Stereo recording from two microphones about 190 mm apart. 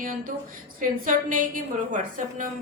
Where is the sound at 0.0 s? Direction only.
45° right (ahead or behind).